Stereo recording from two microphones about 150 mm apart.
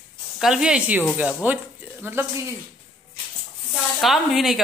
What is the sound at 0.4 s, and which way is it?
Speech, 5° right (ahead or behind).